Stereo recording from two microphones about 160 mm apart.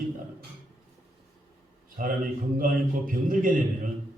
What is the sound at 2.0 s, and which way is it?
A man's voice, 65° right (ahead or behind).